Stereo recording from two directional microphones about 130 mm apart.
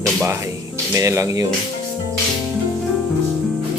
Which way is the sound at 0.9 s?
25° right (ahead or behind).